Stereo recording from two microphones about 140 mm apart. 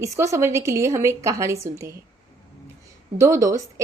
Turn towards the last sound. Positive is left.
turn(degrees=-20)  # may be behind; listen again after turning